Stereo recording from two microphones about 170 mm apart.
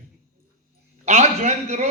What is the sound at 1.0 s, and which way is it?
Speech, 40° right (ahead or behind).